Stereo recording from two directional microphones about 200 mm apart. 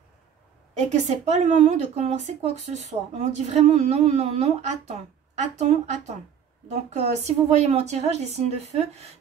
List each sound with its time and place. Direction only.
0.7 s a woman's voice: 35° right (ahead or behind)